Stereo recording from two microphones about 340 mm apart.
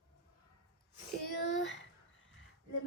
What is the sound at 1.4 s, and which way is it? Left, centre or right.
Speech, left.